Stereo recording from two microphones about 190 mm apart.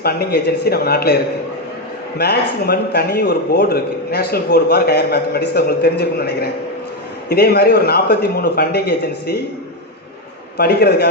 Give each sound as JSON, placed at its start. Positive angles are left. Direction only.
{"t": 0.0, "sound": "a man's voice", "side_deg": 55}
{"t": 2.1, "sound": "a man's voice", "side_deg": 55}
{"t": 10.6, "sound": "a man's voice", "side_deg": 55}